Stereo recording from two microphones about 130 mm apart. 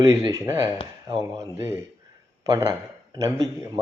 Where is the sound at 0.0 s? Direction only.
25° right (ahead or behind).